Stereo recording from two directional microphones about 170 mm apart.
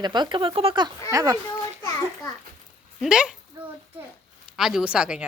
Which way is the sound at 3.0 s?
5° right (ahead or behind).